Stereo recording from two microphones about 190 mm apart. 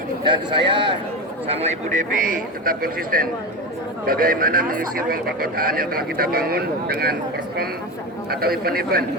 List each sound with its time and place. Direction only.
0.3 s speech: 25° right (ahead or behind); by 9.0 s 55° right (ahead or behind)